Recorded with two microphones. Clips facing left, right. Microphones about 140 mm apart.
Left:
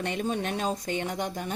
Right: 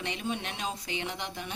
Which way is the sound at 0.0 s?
45° left (ahead or behind).